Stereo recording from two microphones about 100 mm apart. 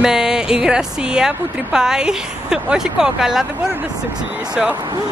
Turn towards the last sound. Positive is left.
turn(degrees=-10)  # may be behind; listen again after turning